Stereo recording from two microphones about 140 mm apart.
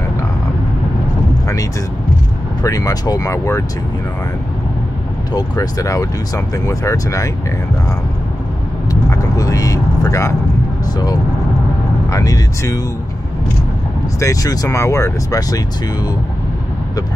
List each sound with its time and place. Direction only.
2.6 s speech: 25° left (ahead or behind)
5.3 s speech: 25° left (ahead or behind)
9.1 s vehicle: 25° left (ahead or behind)
10.9 s speech: 30° left (ahead or behind)
14.2 s speech: 25° left (ahead or behind)